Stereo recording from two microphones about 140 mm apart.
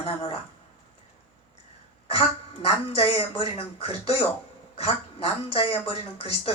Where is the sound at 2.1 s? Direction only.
45° left (ahead or behind).